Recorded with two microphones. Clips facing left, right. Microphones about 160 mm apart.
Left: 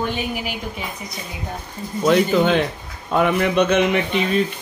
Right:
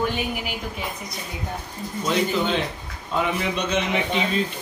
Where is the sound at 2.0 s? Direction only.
60° left (ahead or behind).